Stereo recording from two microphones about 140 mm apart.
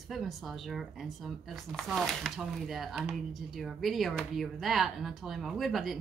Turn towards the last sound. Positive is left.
turn(degrees=0)  # may be behind; listen again after turning